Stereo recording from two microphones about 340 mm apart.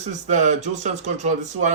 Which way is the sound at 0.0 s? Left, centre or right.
Right.